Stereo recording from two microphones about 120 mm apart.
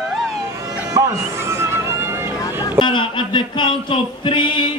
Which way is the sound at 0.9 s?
25° right (ahead or behind).